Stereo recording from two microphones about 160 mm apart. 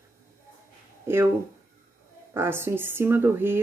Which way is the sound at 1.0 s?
15° right (ahead or behind).